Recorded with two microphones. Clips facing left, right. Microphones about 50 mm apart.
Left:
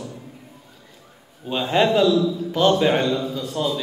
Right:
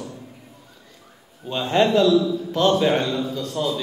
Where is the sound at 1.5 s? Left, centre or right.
Centre.